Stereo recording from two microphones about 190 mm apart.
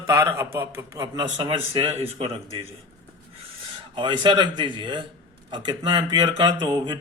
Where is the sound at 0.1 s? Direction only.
15° right (ahead or behind).